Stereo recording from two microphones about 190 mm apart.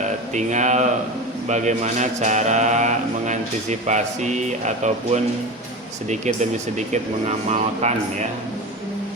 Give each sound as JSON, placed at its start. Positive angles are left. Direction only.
{"t": 0.3, "sound": "speech", "side_deg": -40}